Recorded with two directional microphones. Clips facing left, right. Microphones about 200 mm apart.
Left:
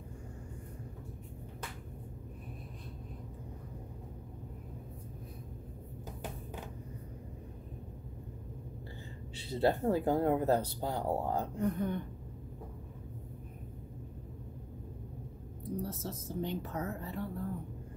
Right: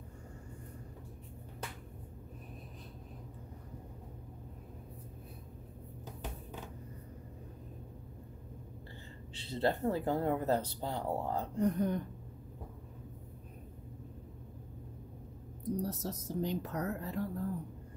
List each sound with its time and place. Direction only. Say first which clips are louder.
9.3 s speech: left 3 dB; 10° left (ahead or behind)
11.6 s a woman's voice: right 4 dB; 35° right (ahead or behind)
15.7 s a woman's voice: right 2 dB; 40° right (ahead or behind)